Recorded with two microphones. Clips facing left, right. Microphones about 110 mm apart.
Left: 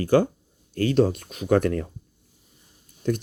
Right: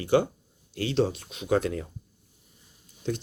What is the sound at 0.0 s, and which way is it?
Speech, 45° left (ahead or behind).